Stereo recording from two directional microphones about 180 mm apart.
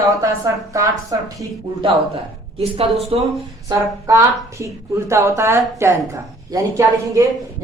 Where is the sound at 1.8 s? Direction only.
30° right (ahead or behind).